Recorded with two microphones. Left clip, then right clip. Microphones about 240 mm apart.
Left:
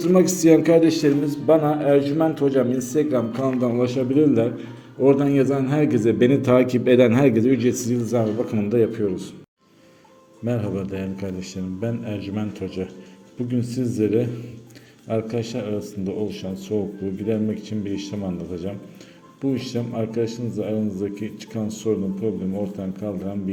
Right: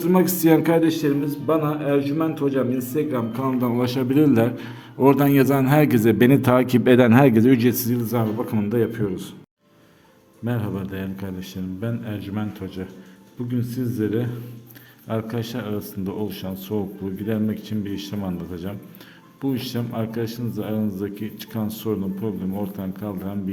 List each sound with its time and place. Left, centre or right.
0.0 s a man's voice: centre
3.6 s a man's voice: right
10.4 s a man's voice: centre